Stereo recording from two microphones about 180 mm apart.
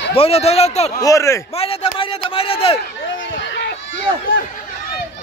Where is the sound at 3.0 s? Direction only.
90° left.